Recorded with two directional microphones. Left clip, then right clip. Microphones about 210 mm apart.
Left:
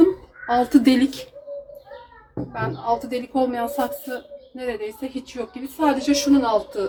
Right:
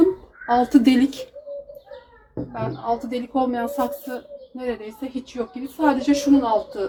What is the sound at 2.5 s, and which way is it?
A woman's voice, 10° right (ahead or behind).